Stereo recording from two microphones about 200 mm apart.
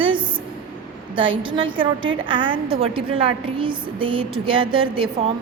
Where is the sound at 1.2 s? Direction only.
25° right (ahead or behind).